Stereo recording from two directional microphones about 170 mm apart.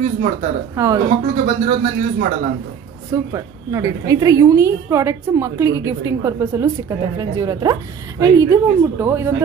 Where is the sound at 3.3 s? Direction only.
20° right (ahead or behind).